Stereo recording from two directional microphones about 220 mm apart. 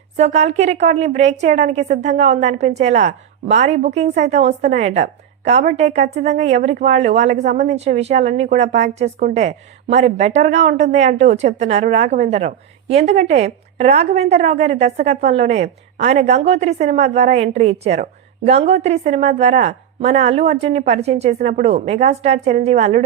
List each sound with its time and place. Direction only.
0.2 s a woman's voice: 30° right (ahead or behind)